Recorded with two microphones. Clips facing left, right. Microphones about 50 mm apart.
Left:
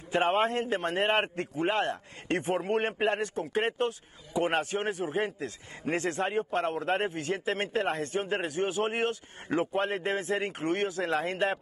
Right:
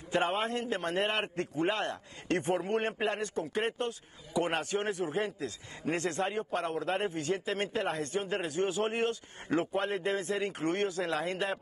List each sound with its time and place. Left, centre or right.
0.2 s a man's voice: left
1.2 s a man's voice: centre
1.7 s a man's voice: left
3.0 s a man's voice: left
3.8 s speech: left
4.5 s a man's voice: left